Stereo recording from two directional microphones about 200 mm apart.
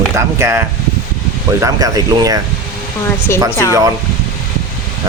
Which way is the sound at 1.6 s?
15° right (ahead or behind).